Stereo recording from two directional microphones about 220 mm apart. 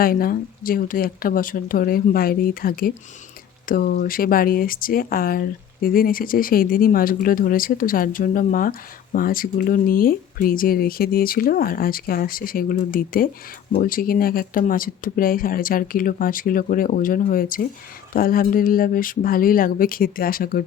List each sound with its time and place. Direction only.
0.0 s speech: 40° left (ahead or behind)